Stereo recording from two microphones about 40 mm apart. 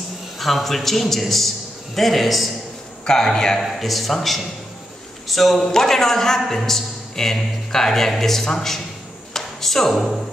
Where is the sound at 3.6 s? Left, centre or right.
Centre.